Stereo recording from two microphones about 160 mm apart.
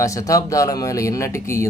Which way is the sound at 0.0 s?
20° left (ahead or behind).